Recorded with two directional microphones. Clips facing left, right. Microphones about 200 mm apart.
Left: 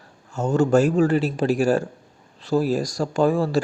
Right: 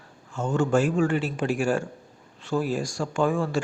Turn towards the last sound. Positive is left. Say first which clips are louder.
# left 5 dB
turn(degrees=35)  # may be behind; listen again after turning